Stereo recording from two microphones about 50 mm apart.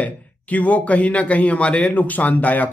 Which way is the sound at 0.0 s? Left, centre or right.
Left.